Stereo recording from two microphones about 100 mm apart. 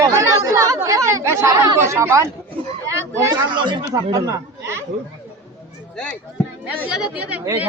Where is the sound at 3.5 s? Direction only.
50° right (ahead or behind).